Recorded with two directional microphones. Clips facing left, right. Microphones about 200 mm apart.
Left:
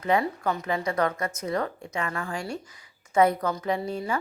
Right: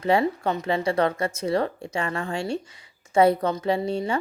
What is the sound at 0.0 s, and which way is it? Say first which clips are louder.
Speech: right 3 dB; 30° right (ahead or behind).